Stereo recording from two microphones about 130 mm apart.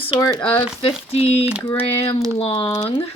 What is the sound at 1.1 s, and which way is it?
Speech, 50° left (ahead or behind).